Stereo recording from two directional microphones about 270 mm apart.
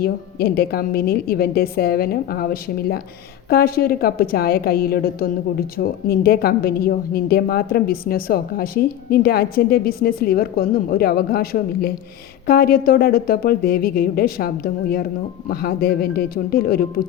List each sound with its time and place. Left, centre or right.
0.0 s a woman's voice: left